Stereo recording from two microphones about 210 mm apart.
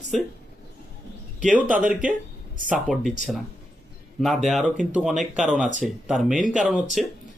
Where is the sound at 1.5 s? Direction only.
40° right (ahead or behind).